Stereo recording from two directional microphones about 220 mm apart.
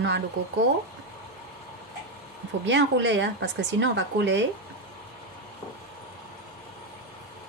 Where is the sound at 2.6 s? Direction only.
55° right (ahead or behind).